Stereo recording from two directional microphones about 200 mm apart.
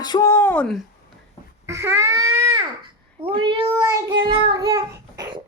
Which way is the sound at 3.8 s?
20° right (ahead or behind).